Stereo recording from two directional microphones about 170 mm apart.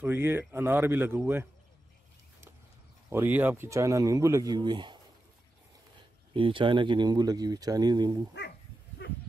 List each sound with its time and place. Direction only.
0.0 s a man's voice: 10° right (ahead or behind)
3.1 s speech: 10° right (ahead or behind); by 4.9 s 25° right (ahead or behind)
5.9 s speech: 30° right (ahead or behind)
9.0 s sheep: 75° left (ahead or behind)